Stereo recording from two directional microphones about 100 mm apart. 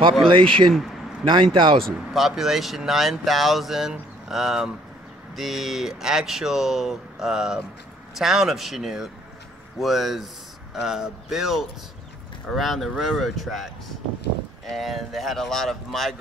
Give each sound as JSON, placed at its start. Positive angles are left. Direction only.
{"t": 0.2, "sound": "a man's voice", "side_deg": -60}
{"t": 2.1, "sound": "speech", "side_deg": -5}
{"t": 14.8, "sound": "speech", "side_deg": 0}